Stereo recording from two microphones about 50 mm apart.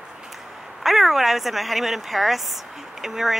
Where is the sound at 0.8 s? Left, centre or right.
Centre.